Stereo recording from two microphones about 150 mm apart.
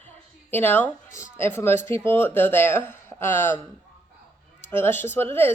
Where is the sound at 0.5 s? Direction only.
15° left (ahead or behind).